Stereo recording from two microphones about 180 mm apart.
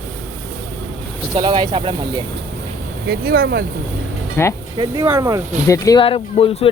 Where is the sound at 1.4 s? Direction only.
25° right (ahead or behind).